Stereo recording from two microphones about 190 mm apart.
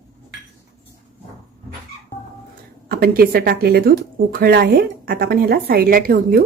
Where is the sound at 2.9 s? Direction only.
55° right (ahead or behind).